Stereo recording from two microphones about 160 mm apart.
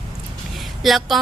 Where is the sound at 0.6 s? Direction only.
Centre (ahead or behind).